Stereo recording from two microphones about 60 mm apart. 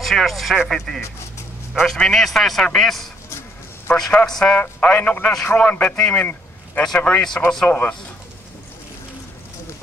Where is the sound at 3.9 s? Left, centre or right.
Left.